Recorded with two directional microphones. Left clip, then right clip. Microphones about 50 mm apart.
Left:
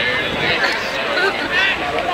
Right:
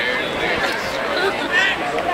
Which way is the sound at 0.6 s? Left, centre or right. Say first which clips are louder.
Left 3 dB; right.